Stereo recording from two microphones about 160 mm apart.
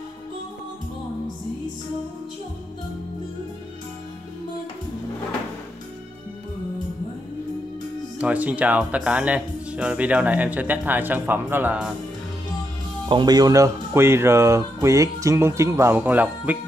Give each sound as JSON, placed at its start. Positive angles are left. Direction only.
{"t": 8.2, "sound": "speech", "side_deg": -10}
{"t": 13.1, "sound": "speech", "side_deg": -25}